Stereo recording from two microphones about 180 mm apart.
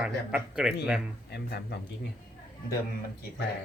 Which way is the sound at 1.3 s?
65° left (ahead or behind).